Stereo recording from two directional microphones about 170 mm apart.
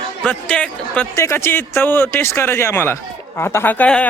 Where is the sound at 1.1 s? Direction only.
15° left (ahead or behind).